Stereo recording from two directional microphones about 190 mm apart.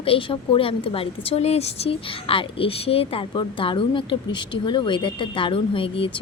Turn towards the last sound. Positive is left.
turn(degrees=30)  # may be behind; listen again after turning